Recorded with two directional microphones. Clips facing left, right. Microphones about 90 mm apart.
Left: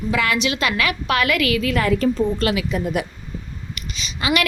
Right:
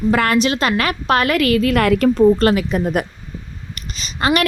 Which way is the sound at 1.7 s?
65° right (ahead or behind).